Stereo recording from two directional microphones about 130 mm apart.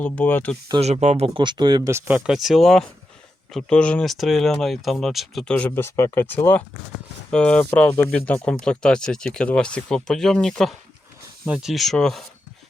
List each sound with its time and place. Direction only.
0.0 s speech: 10° left (ahead or behind)
0.8 s speech: 55° right (ahead or behind); by 1.9 s 35° right (ahead or behind)
1.9 s speech: 15° right (ahead or behind); by 12.2 s 5° left (ahead or behind)